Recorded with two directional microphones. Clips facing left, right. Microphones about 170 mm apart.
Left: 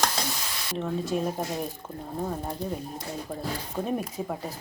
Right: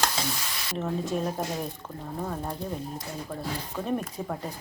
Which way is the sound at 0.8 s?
Centre (ahead or behind).